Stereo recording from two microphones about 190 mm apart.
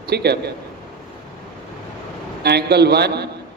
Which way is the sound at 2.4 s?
60° right (ahead or behind).